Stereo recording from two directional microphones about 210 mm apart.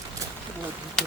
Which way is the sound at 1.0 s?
5° left (ahead or behind).